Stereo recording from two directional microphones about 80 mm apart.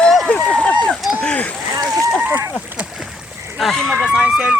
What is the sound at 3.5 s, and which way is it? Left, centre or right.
Speech, centre.